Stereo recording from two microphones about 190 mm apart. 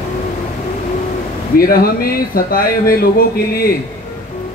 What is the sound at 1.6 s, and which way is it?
Speech, 50° left (ahead or behind).